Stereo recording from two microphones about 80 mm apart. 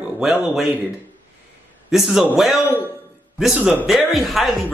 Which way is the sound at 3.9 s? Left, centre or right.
Centre.